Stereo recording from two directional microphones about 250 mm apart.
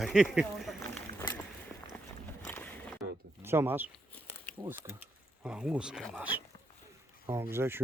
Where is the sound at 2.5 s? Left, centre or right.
Centre.